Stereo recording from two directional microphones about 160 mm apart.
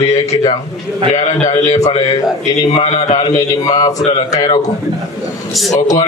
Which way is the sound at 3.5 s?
20° left (ahead or behind).